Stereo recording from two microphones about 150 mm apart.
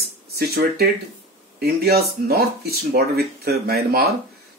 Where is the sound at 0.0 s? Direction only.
90° right.